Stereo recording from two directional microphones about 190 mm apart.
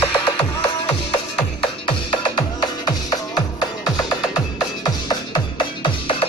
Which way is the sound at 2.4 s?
20° left (ahead or behind).